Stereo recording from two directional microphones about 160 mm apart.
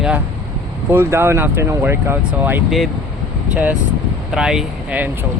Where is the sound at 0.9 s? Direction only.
15° right (ahead or behind).